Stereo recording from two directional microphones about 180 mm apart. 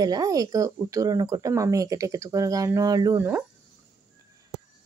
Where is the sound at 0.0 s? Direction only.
20° right (ahead or behind).